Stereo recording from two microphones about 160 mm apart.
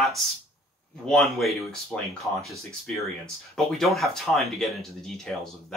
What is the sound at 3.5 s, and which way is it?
Speech, centre (ahead or behind).